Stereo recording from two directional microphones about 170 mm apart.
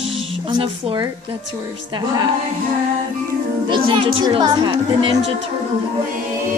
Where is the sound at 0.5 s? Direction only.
25° right (ahead or behind).